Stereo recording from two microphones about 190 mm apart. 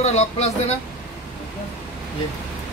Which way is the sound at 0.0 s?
35° left (ahead or behind).